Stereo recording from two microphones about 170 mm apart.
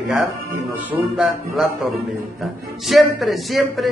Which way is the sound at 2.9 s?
Centre (ahead or behind).